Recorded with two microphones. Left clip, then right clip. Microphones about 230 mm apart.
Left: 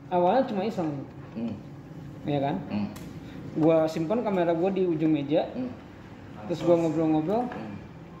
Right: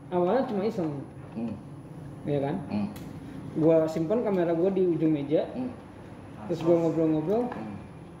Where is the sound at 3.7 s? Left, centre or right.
Centre.